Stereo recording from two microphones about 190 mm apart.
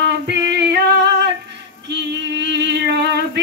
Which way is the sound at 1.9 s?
65° right (ahead or behind).